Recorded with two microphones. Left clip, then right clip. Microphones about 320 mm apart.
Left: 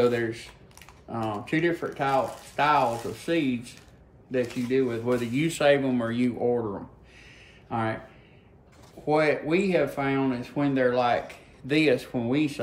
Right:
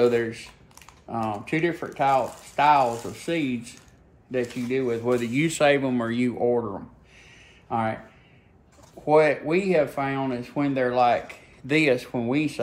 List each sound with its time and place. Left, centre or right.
0.0 s speech: centre
7.7 s speech: centre
9.0 s speech: centre